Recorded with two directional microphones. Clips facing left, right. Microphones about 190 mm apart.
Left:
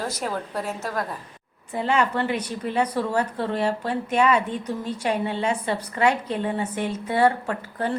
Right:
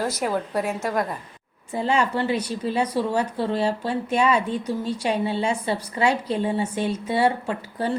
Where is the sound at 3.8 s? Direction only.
25° right (ahead or behind).